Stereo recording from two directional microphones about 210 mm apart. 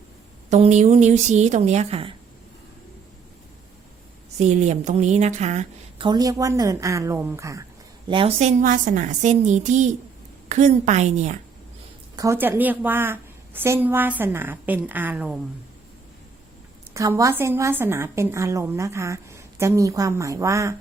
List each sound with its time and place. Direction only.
0.5 s a woman's voice: 35° right (ahead or behind)
4.4 s a woman's voice: 35° right (ahead or behind)
6.1 s a woman's voice: 15° right (ahead or behind)
8.0 s a woman's voice: 25° right (ahead or behind)
12.1 s a woman's voice: 15° right (ahead or behind)
16.9 s a woman's voice: 15° right (ahead or behind)